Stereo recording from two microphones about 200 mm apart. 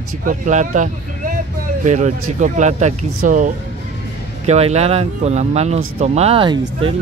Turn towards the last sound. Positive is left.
turn(degrees=-25)  # may be behind; listen again after turning